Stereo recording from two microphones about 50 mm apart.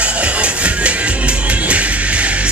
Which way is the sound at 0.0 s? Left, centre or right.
Right.